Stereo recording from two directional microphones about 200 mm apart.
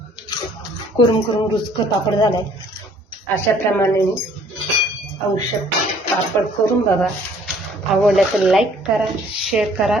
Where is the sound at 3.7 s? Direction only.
15° left (ahead or behind).